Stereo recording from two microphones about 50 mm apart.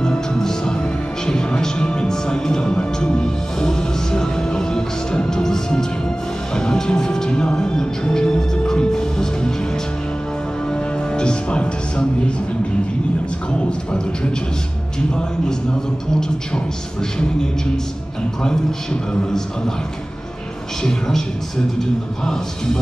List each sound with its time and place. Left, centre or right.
0.0 s music: centre
10.7 s music: centre
13.5 s a man's voice: centre